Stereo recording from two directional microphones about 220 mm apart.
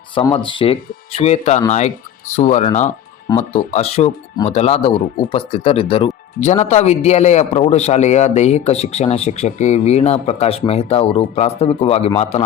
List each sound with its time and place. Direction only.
0.1 s speech: 20° left (ahead or behind)